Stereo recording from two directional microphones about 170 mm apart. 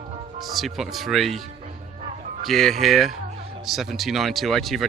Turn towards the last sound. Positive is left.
turn(degrees=0)  # may be behind; listen again after turning